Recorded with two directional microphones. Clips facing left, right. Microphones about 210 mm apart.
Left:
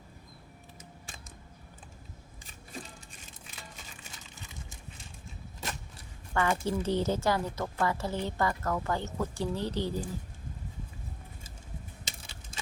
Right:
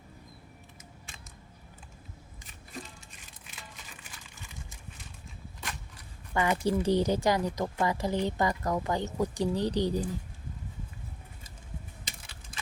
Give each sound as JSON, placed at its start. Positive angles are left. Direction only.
{"t": 6.3, "sound": "a woman's voice", "side_deg": -15}
{"t": 12.0, "sound": "crushing", "side_deg": 25}